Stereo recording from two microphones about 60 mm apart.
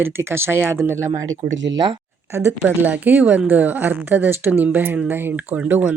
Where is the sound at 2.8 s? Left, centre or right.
Right.